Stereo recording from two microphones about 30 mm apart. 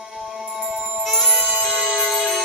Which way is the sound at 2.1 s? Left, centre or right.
Centre.